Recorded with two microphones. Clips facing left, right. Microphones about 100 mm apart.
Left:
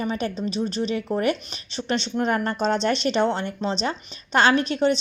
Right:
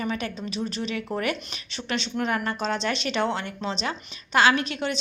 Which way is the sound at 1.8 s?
35° left (ahead or behind).